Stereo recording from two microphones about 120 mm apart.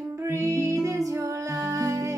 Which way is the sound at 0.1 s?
25° right (ahead or behind).